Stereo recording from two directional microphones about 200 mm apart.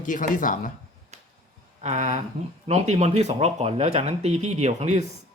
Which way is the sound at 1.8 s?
35° right (ahead or behind).